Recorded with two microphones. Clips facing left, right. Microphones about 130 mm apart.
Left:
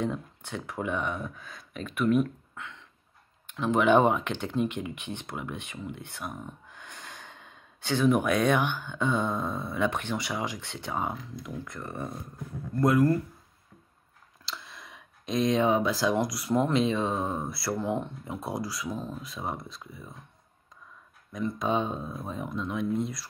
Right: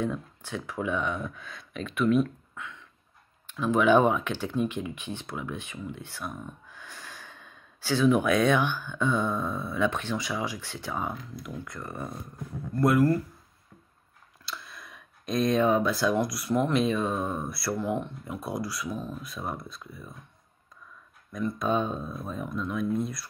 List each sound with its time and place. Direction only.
0.0 s speech: 20° left (ahead or behind)
1.3 s speech: 40° left (ahead or behind)
3.4 s speech: 20° left (ahead or behind)
14.5 s speech: 20° left (ahead or behind)
21.3 s speech: 20° left (ahead or behind)